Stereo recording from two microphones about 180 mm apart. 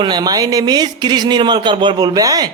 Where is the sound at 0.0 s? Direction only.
25° right (ahead or behind).